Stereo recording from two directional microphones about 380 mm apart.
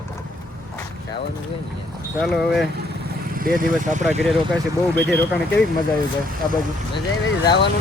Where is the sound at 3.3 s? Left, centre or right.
Right.